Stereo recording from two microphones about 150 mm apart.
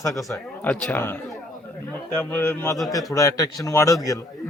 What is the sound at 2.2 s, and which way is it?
A man's voice, 15° left (ahead or behind).